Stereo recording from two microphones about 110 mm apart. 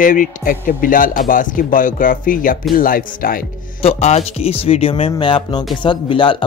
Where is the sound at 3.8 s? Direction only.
75° left (ahead or behind).